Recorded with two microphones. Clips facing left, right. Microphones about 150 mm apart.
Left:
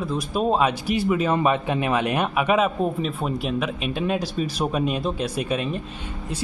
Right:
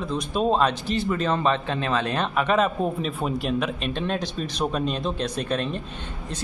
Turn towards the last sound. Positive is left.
turn(degrees=5)  # may be behind; listen again after turning